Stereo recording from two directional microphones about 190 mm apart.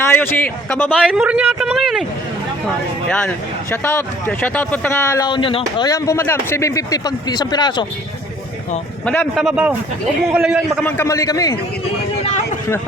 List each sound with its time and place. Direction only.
0.0 s a man's voice: 10° left (ahead or behind)
0.9 s speech: 5° right (ahead or behind); by 7.9 s 20° left (ahead or behind)
9.0 s speech: 5° left (ahead or behind)
10.8 s speech: 15° left (ahead or behind)